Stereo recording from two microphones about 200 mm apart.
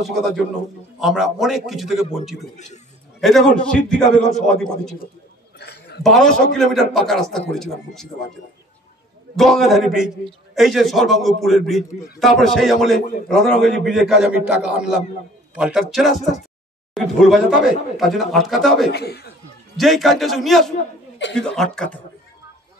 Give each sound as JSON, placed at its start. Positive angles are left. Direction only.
{"t": 0.0, "sound": "a man's voice", "side_deg": 0}
{"t": 2.5, "sound": "a man's voice", "side_deg": 35}
{"t": 3.2, "sound": "a man's voice", "side_deg": 0}
{"t": 5.6, "sound": "a sound", "side_deg": 55}
{"t": 6.0, "sound": "a man's voice", "side_deg": 0}
{"t": 9.4, "sound": "a man's voice", "side_deg": 0}
{"t": 18.9, "sound": "speech", "side_deg": 55}
{"t": 19.8, "sound": "a man's voice", "side_deg": 0}